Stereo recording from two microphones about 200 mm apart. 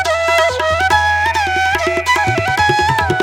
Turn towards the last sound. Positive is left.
turn(degrees=0)  # may be behind; listen again after turning